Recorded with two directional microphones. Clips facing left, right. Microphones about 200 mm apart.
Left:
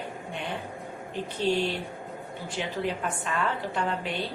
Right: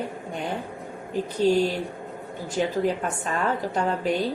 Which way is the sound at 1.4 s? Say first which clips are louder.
Right 5 dB; 40° right (ahead or behind).